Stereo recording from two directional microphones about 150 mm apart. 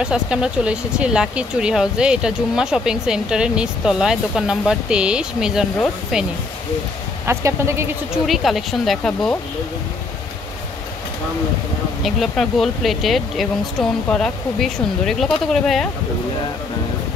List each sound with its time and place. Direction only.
0.0 s speech: 5° right (ahead or behind)
7.2 s speech: 20° right (ahead or behind)
8.1 s speech: centre (ahead or behind)
12.0 s speech: centre (ahead or behind)